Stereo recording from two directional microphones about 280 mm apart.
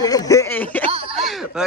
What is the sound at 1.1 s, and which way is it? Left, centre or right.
Speech, centre.